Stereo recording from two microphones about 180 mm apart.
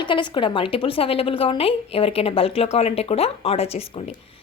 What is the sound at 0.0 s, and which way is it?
A woman's voice, 25° left (ahead or behind).